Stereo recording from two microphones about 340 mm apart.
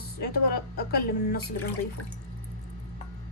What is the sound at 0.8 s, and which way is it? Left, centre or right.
Speech, left.